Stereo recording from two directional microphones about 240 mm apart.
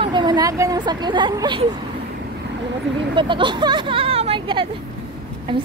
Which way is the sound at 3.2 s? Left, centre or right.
Centre.